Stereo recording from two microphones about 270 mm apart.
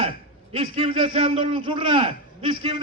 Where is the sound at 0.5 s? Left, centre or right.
Centre.